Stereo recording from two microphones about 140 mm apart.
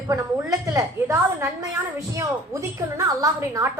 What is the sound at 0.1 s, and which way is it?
A woman's voice, 20° right (ahead or behind).